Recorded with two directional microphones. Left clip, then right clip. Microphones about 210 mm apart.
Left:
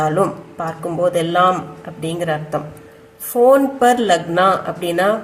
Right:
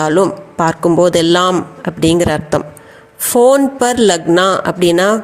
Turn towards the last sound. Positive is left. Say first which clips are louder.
# right 6 dB
turn(degrees=-40)  # may be behind; listen again after turning